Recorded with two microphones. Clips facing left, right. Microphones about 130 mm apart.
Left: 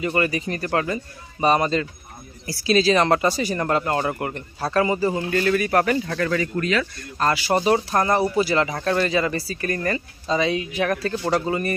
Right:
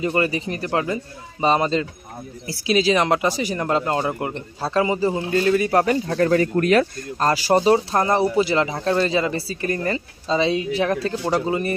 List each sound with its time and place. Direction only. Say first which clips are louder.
0.0 s speech: right 1 dB; 25° right (ahead or behind)
6.6 s speech: right 6 dB; 55° right (ahead or behind)
7.2 s speech: right 3 dB; 35° right (ahead or behind)